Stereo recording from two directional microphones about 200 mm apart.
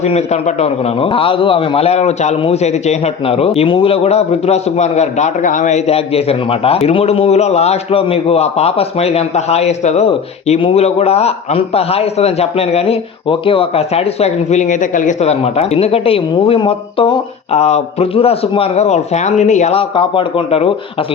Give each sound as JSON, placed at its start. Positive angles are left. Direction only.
{"t": 0.0, "sound": "a man's voice", "side_deg": 35}